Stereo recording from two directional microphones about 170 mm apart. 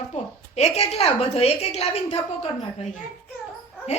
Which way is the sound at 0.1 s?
40° left (ahead or behind).